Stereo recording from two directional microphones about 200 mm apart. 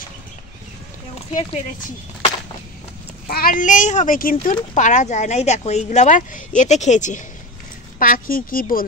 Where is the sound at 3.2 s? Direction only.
45° left (ahead or behind).